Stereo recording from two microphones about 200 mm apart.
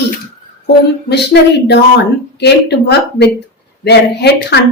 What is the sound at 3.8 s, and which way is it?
Speech, 55° left (ahead or behind).